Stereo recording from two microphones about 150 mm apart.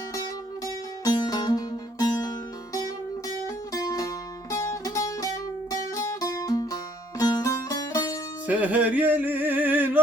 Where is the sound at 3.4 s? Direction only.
25° left (ahead or behind).